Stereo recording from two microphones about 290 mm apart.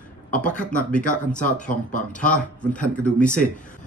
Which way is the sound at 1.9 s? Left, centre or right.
Left.